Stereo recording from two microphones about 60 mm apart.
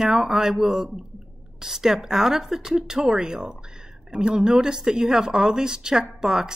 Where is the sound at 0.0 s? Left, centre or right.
Centre.